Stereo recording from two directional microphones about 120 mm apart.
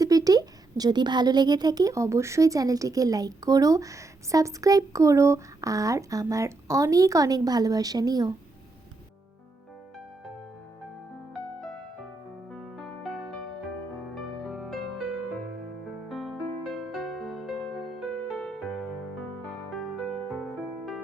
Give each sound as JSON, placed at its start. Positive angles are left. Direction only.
{"t": 0.0, "sound": "a woman's voice", "side_deg": -30}
{"t": 12.5, "sound": "music", "side_deg": 5}
{"t": 14.4, "sound": "music", "side_deg": 0}
{"t": 16.0, "sound": "music", "side_deg": 0}
{"t": 20.4, "sound": "music", "side_deg": 0}